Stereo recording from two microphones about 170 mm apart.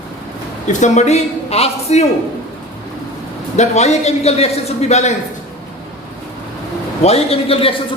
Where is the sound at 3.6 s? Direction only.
40° left (ahead or behind).